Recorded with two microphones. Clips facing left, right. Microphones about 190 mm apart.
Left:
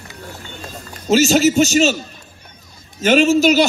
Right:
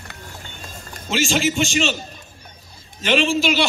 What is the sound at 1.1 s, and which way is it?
Speech, 40° left (ahead or behind).